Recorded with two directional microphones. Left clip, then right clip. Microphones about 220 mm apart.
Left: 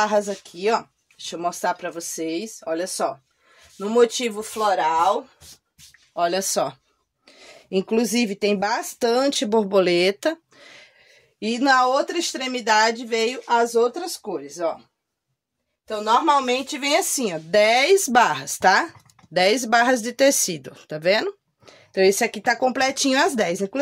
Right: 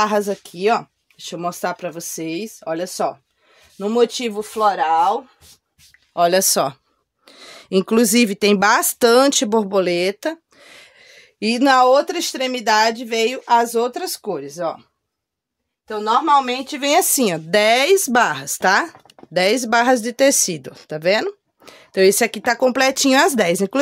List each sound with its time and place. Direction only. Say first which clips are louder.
0.0 s speech: right 2 dB; 55° right (ahead or behind); by 5.0 s 30° right (ahead or behind)
6.1 s speech: right 6 dB; 55° right (ahead or behind)
7.2 s speech: right 6 dB; 25° right (ahead or behind)
11.3 s speech: right 4 dB; 55° right (ahead or behind)
15.9 s speech: right 3 dB; 30° right (ahead or behind)
21.6 s speech: right 4 dB; 30° right (ahead or behind)